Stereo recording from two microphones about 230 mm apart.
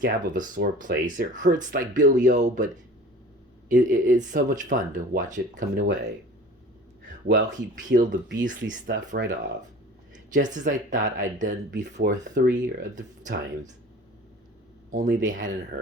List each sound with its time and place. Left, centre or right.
0.0 s speech: right
3.7 s speech: right
7.3 s speech: right
10.3 s speech: right
14.9 s speech: right